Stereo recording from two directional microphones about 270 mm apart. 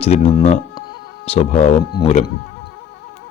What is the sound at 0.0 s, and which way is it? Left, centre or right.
Speech, left.